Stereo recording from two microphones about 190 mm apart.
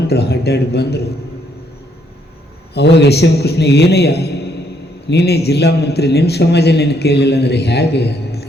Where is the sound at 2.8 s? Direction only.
60° left (ahead or behind).